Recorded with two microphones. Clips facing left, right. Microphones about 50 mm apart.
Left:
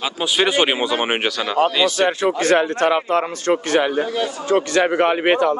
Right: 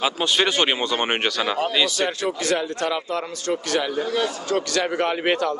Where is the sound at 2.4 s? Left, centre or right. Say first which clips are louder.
Left 8 dB; left.